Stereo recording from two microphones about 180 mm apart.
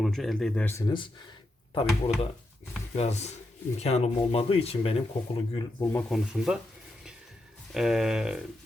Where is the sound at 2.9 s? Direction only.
35° left (ahead or behind).